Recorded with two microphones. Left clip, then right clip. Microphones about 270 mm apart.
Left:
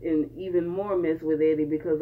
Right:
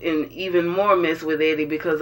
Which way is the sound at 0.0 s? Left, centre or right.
Centre.